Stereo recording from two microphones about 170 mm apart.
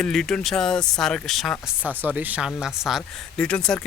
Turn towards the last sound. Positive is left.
turn(degrees=5)  # may be behind; listen again after turning